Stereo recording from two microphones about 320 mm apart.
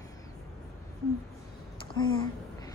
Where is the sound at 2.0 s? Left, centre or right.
Centre.